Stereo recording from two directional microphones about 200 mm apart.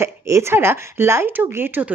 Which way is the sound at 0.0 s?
15° right (ahead or behind).